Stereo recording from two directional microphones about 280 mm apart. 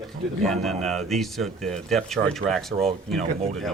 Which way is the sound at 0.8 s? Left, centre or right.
Centre.